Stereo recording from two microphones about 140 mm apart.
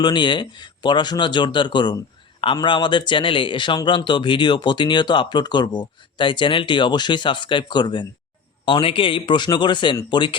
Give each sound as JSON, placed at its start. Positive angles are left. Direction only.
{"t": 0.0, "sound": "speech", "side_deg": 35}